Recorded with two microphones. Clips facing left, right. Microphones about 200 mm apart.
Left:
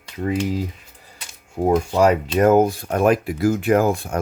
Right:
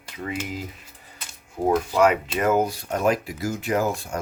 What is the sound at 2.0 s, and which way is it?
Speech, 40° left (ahead or behind).